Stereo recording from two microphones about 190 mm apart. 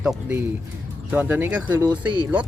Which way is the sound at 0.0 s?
5° right (ahead or behind).